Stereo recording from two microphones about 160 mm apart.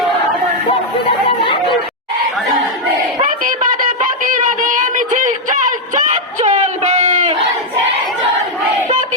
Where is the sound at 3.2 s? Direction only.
55° right (ahead or behind).